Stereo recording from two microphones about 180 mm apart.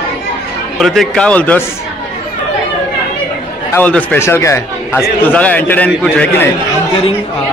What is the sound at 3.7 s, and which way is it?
Speech, 10° left (ahead or behind).